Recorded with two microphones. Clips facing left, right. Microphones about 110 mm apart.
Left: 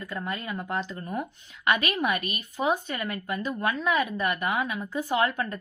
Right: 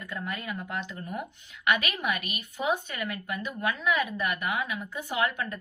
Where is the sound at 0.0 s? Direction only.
35° left (ahead or behind).